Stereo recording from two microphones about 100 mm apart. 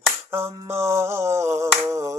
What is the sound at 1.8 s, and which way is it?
Finger snapping, 30° right (ahead or behind).